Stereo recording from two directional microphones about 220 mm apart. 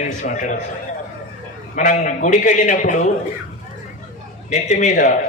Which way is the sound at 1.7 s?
35° left (ahead or behind).